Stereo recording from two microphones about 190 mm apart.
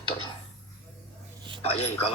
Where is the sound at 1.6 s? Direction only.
35° left (ahead or behind).